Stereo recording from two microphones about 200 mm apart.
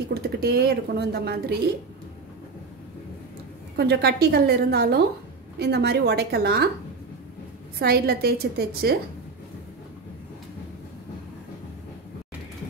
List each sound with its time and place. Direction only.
0.1 s a woman's voice: 55° right (ahead or behind)
3.7 s a woman's voice: 55° right (ahead or behind)
7.8 s a woman's voice: 50° right (ahead or behind)